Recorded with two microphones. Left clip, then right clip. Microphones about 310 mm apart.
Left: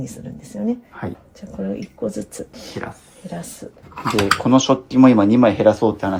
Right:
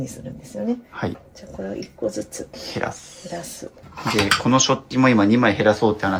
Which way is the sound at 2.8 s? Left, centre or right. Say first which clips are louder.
Right 4 dB; centre.